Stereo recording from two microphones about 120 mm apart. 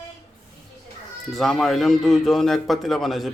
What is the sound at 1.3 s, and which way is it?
Speech, centre (ahead or behind).